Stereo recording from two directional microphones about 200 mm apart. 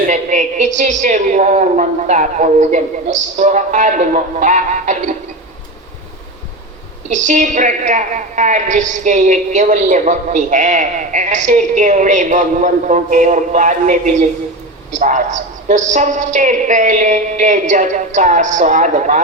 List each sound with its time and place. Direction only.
0.1 s a woman's voice: 40° right (ahead or behind)
7.1 s a woman's voice: 40° right (ahead or behind)